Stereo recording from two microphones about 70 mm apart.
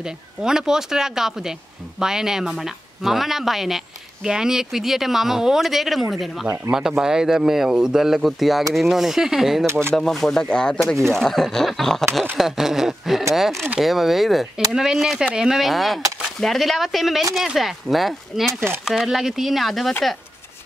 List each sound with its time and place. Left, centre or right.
0.0 s speech: centre
9.7 s speech: right
9.9 s speech: centre
12.4 s speech: centre
18.5 s speech: right
18.9 s speech: centre